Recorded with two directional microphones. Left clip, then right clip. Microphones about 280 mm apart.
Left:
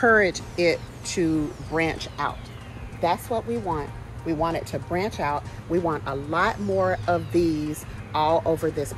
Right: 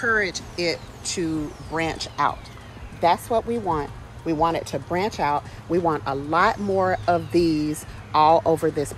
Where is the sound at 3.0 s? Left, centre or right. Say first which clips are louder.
Right 4 dB; right.